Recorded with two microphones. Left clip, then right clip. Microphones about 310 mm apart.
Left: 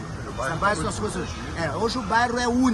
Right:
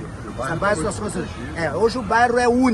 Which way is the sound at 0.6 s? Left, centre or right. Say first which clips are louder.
Right 3 dB; centre.